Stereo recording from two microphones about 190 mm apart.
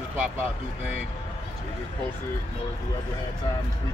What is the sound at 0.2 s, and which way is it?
Speech, 5° right (ahead or behind).